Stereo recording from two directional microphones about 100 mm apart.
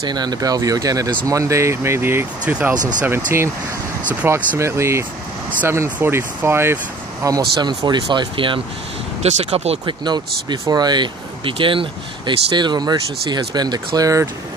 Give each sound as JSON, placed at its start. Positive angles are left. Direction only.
{"t": 0.1, "sound": "speech", "side_deg": -45}
{"t": 2.4, "sound": "speech", "side_deg": -10}
{"t": 4.3, "sound": "speech", "side_deg": -30}
{"t": 7.2, "sound": "speech", "side_deg": -40}
{"t": 9.2, "sound": "speech", "side_deg": -90}
{"t": 9.8, "sound": "speech", "side_deg": -45}